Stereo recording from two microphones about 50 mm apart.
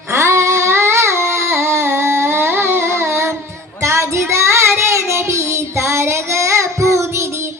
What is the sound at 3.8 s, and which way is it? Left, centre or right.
Child singing, right.